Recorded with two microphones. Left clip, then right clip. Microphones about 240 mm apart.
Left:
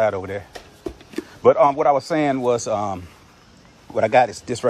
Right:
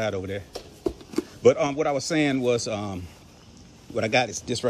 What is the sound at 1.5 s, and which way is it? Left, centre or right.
Speech, centre.